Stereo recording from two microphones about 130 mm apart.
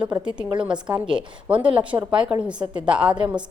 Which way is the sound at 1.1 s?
5° right (ahead or behind).